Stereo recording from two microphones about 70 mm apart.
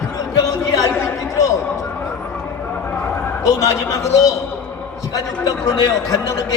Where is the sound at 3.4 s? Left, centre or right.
Left.